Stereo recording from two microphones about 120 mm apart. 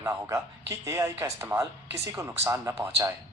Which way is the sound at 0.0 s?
25° right (ahead or behind).